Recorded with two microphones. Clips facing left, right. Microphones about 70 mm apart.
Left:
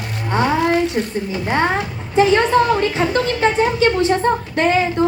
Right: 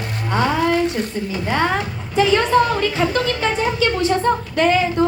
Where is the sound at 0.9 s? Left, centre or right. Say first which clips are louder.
Left 2 dB; left.